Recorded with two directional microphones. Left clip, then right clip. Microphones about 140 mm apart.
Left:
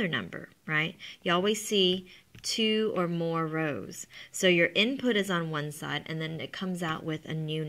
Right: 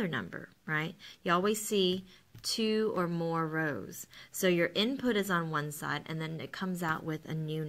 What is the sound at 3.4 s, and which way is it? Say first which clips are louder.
Speech: left 2 dB; 25° left (ahead or behind).